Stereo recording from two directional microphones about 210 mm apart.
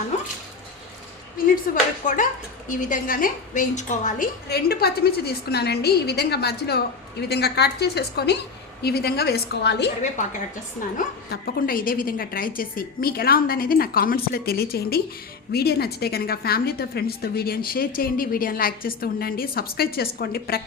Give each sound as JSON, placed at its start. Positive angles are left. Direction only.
{"t": 0.1, "sound": "a sound", "side_deg": 35}
{"t": 1.7, "sound": "a woman's voice", "side_deg": 40}
{"t": 10.0, "sound": "a woman's voice", "side_deg": 35}